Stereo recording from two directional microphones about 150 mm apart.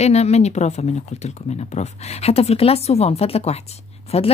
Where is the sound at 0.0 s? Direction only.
45° left (ahead or behind).